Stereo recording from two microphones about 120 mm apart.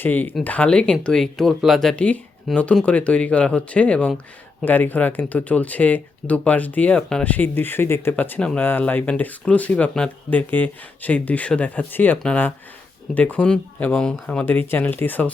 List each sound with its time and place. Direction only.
0.0 s speech: 15° left (ahead or behind)